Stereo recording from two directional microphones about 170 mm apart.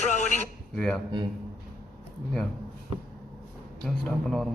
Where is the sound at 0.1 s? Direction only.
45° left (ahead or behind).